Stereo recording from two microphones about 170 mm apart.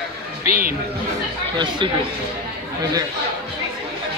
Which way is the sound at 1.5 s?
30° right (ahead or behind).